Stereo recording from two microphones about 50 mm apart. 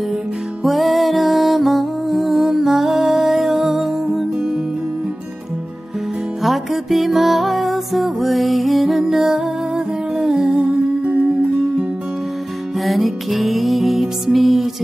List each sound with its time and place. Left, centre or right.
0.7 s music: centre
6.4 s music: centre
10.7 s music: right
12.8 s music: centre